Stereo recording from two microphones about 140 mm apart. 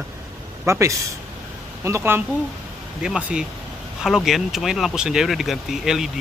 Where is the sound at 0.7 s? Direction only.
20° right (ahead or behind).